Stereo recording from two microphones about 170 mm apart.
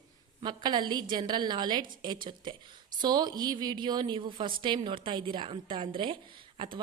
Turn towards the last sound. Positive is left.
turn(degrees=-30)  # may be behind; listen again after turning